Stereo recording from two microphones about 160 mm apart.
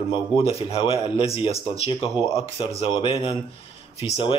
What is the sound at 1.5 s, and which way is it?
Speech, 20° right (ahead or behind).